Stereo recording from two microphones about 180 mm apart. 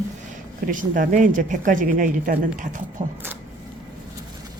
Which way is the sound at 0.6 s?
50° right (ahead or behind).